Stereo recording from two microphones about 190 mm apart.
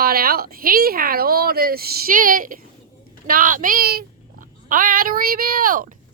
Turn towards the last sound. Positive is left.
turn(degrees=-45)  # may be behind; listen again after turning